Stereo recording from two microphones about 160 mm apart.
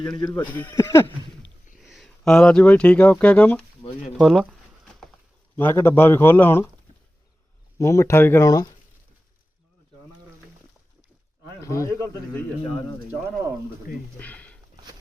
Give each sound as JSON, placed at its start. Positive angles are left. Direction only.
{"t": 0.5, "sound": "speech", "side_deg": 15}
{"t": 1.8, "sound": "speech", "side_deg": 0}
{"t": 5.5, "sound": "speech", "side_deg": 15}
{"t": 7.8, "sound": "speech", "side_deg": 20}
{"t": 11.6, "sound": "a man's voice", "side_deg": 20}
{"t": 14.2, "sound": "a sound", "side_deg": 10}